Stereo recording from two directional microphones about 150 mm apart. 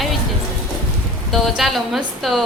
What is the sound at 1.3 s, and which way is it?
A woman's voice, centre (ahead or behind).